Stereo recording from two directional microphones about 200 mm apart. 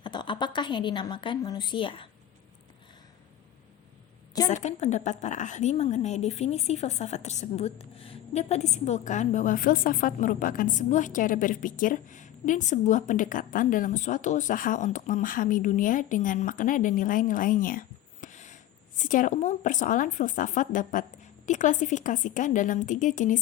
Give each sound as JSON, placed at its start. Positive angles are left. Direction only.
{"t": 0.0, "sound": "a woman's voice", "side_deg": 20}
{"t": 4.4, "sound": "a woman's voice", "side_deg": 35}